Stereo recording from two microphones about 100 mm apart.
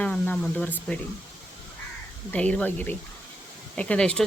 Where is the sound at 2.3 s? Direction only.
15° left (ahead or behind).